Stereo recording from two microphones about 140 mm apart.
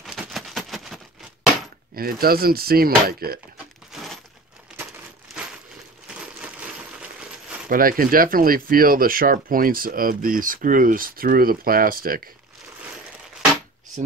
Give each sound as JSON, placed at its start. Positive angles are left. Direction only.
{"t": 0.0, "sound": "a sound", "side_deg": 0}
{"t": 2.0, "sound": "speech", "side_deg": -90}
{"t": 3.9, "sound": "a sound", "side_deg": 0}
{"t": 6.0, "sound": "coin", "side_deg": -10}
{"t": 7.7, "sound": "speech", "side_deg": -90}
{"t": 12.8, "sound": "coin", "side_deg": -5}